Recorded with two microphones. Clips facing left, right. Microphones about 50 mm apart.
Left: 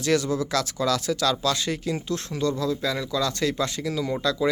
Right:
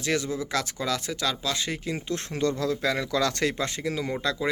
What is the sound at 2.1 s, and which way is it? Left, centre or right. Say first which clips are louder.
Speech: right 2 dB; right.